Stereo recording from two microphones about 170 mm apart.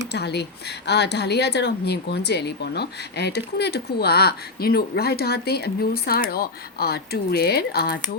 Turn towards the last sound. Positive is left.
turn(degrees=70)  # may be behind; listen again after turning